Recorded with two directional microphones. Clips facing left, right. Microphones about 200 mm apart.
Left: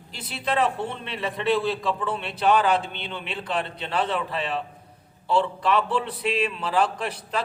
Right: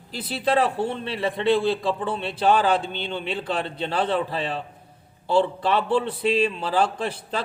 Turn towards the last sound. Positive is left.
turn(degrees=-30)  # may be behind; listen again after turning